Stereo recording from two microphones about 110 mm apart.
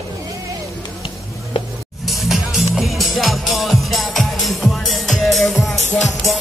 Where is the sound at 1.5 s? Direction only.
60° left (ahead or behind).